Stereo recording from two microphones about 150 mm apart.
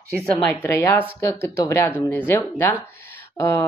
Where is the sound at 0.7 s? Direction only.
20° left (ahead or behind).